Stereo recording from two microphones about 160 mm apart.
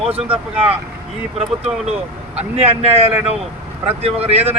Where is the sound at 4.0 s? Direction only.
40° right (ahead or behind).